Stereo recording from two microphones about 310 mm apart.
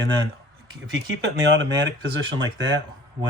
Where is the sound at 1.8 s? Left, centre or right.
Right.